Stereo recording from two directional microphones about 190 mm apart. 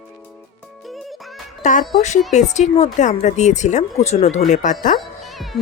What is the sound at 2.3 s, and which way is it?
A woman's voice, 40° left (ahead or behind).